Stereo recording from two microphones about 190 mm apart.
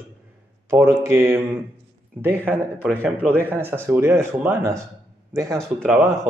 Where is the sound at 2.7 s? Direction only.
10° left (ahead or behind).